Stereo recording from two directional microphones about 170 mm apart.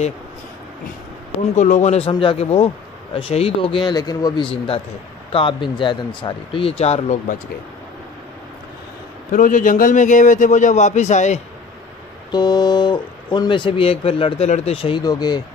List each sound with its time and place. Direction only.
1.6 s speech: 45° left (ahead or behind)
9.3 s a man's voice: 50° left (ahead or behind)
12.3 s speech: 25° left (ahead or behind)